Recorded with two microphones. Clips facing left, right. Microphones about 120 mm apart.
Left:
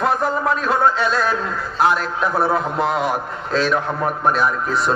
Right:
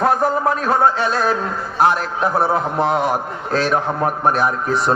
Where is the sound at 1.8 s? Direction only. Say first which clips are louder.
Right 2 dB; 40° right (ahead or behind).